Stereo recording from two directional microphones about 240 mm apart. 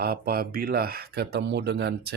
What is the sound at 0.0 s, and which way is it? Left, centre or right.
Speech, right.